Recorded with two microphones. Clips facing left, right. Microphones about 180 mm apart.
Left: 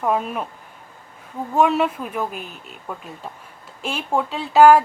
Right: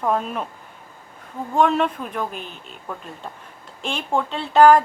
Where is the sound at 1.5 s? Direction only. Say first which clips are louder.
Left 1 dB; 5° left (ahead or behind).